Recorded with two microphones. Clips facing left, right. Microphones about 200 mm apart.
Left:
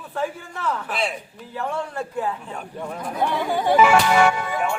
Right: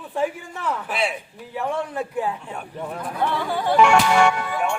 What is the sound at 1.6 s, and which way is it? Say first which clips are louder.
Speech: right 2 dB; 15° right (ahead or behind).